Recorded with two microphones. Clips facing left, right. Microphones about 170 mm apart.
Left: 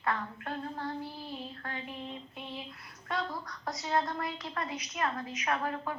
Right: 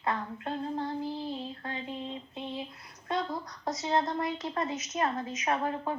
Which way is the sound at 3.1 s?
20° right (ahead or behind).